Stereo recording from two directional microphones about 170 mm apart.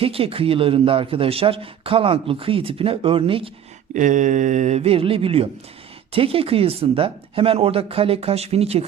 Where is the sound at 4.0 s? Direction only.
50° right (ahead or behind).